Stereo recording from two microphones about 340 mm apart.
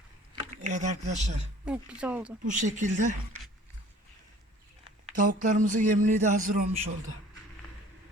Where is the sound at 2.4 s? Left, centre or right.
Right.